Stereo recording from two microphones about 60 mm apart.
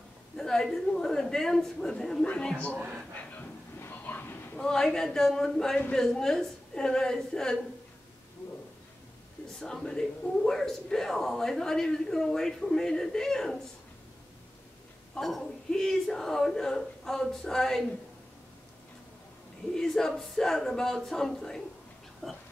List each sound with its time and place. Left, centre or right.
0.4 s speech: centre
3.8 s a sound: left
4.6 s speech: centre
9.6 s speech: centre
15.1 s speech: centre
19.7 s speech: centre